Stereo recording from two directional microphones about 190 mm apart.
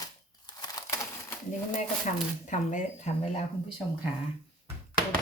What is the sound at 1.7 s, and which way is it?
Speech, 40° left (ahead or behind).